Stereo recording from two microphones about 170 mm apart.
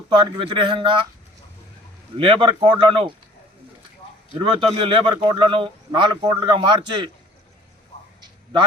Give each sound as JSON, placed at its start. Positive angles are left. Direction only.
{"t": 0.1, "sound": "a man's voice", "side_deg": -30}
{"t": 2.1, "sound": "a man's voice", "side_deg": -30}
{"t": 4.4, "sound": "a man's voice", "side_deg": -30}